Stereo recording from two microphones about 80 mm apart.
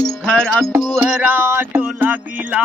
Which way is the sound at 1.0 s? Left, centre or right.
Right.